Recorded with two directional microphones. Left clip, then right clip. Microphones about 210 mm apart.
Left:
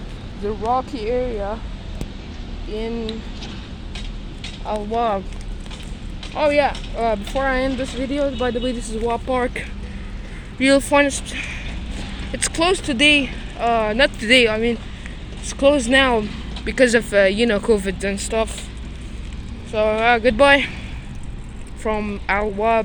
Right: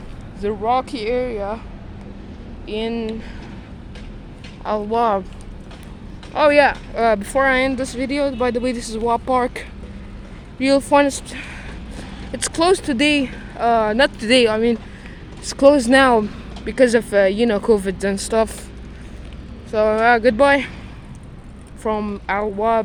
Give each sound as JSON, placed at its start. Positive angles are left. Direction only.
{"t": 0.4, "sound": "speech", "side_deg": -30}
{"t": 1.0, "sound": "speech", "side_deg": -10}
{"t": 2.7, "sound": "speech", "side_deg": -40}
{"t": 4.6, "sound": "speech", "side_deg": -25}
{"t": 6.3, "sound": "speech", "side_deg": -35}
{"t": 10.8, "sound": "speech", "side_deg": -20}
{"t": 15.4, "sound": "speech", "side_deg": -35}
{"t": 16.6, "sound": "speech", "side_deg": -15}
{"t": 19.7, "sound": "speech", "side_deg": -30}
{"t": 20.3, "sound": "speech", "side_deg": -10}
{"t": 21.8, "sound": "speech", "side_deg": -15}